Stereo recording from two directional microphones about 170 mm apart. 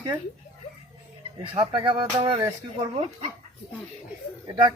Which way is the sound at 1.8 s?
30° right (ahead or behind).